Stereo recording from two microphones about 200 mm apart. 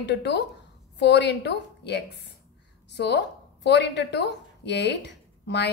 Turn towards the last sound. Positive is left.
turn(degrees=60)  # may be behind; listen again after turning